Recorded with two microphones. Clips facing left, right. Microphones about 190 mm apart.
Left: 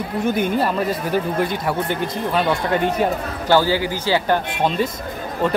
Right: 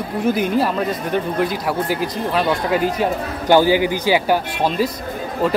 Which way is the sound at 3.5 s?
15° right (ahead or behind).